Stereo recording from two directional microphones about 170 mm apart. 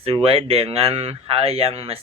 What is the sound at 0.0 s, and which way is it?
Speech, 35° right (ahead or behind).